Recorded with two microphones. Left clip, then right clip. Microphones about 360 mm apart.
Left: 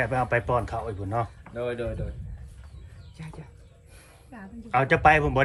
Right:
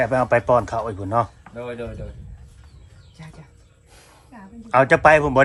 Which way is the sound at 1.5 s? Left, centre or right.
Centre.